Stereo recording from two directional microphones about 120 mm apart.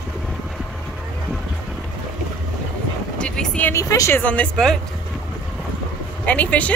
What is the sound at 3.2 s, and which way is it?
Speech, 10° left (ahead or behind).